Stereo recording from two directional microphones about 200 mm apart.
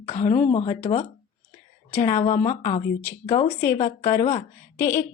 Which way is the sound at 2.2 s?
40° left (ahead or behind).